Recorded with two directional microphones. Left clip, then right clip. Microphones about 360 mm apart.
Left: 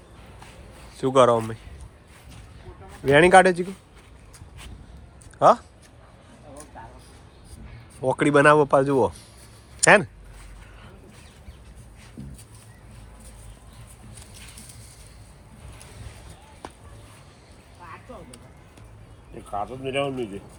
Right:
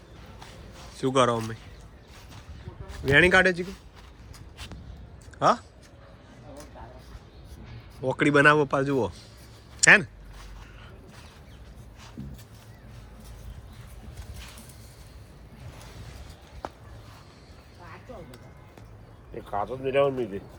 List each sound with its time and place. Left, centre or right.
0.9 s speech: centre
2.9 s speech: centre
5.4 s speech: centre
8.0 s speech: centre
19.5 s a sound: centre
19.9 s speech: centre